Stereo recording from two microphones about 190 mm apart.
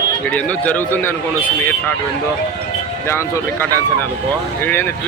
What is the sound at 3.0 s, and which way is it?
Speech, 15° left (ahead or behind).